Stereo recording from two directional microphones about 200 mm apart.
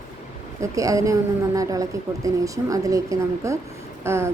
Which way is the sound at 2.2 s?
15° right (ahead or behind).